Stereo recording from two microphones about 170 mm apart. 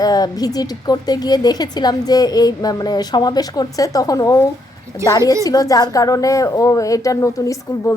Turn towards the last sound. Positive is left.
turn(degrees=20)  # may be behind; listen again after turning